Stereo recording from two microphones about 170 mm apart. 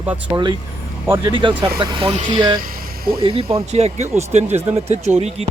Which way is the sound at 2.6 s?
60° right (ahead or behind).